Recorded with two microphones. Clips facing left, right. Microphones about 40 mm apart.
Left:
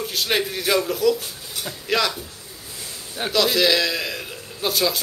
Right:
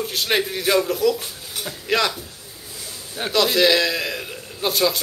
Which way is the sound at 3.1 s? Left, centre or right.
Centre.